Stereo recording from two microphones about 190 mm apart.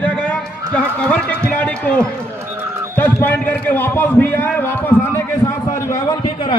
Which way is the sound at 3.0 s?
10° left (ahead or behind).